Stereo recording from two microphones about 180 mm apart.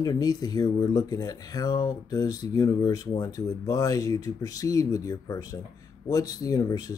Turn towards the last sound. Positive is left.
turn(degrees=20)  # may be behind; listen again after turning